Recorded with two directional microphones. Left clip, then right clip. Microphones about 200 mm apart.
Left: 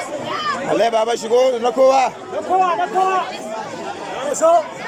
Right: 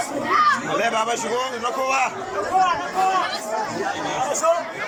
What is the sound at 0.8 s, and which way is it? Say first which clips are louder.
A man's voice: left 5 dB; 25° left (ahead or behind).